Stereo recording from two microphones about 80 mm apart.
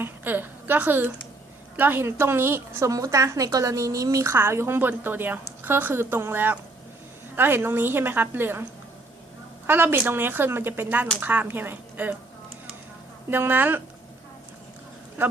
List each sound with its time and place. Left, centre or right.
0.0 s a woman's voice: right
2.9 s a woman's voice: right
4.4 s a woman's voice: right
9.6 s a woman's voice: right
13.3 s a woman's voice: right
15.2 s a woman's voice: right